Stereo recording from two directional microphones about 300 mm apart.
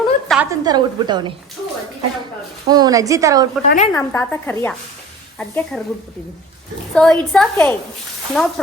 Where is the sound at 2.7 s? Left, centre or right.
Centre.